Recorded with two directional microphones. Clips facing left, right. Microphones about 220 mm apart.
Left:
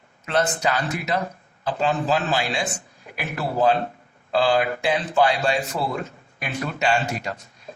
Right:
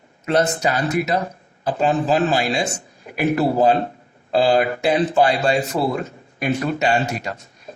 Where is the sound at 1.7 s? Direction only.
45° right (ahead or behind).